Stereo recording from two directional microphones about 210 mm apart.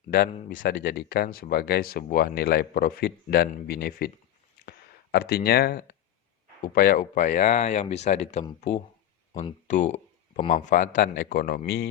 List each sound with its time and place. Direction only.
0.4 s speech: 40° left (ahead or behind)
5.1 s speech: 45° left (ahead or behind)